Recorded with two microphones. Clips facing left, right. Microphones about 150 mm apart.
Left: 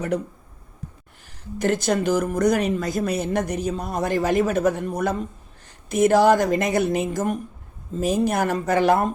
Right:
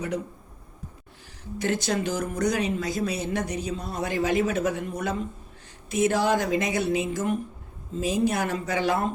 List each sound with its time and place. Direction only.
1.7 s speech: 45° left (ahead or behind)